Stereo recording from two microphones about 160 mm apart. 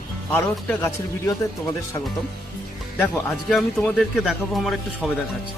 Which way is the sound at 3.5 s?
Centre (ahead or behind).